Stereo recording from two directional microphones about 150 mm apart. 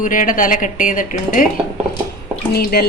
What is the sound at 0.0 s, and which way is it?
Speech, 65° left (ahead or behind).